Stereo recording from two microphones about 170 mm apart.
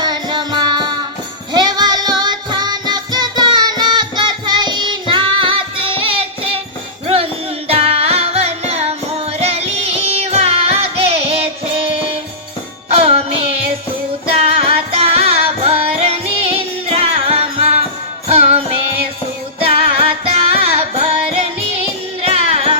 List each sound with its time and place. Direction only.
0.0 s music: 25° right (ahead or behind)
7.7 s music: 35° right (ahead or behind)
20.1 s music: 35° right (ahead or behind)